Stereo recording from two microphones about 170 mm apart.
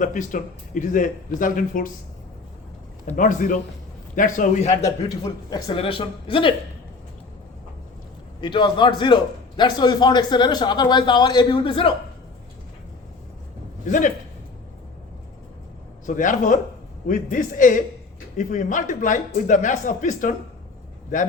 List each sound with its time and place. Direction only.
0.0 s a man's voice: 50° left (ahead or behind)
3.1 s a man's voice: 50° left (ahead or behind)
4.8 s a man's voice: 20° left (ahead or behind)
8.4 s a man's voice: 25° left (ahead or behind)
13.8 s a man's voice: 50° left (ahead or behind)
16.0 s a man's voice: 50° left (ahead or behind)